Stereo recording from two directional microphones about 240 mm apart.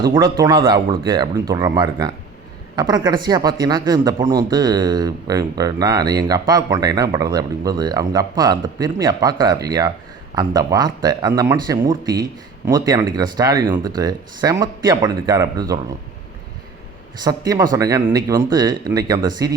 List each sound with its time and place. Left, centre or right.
0.1 s speech: centre
17.2 s speech: centre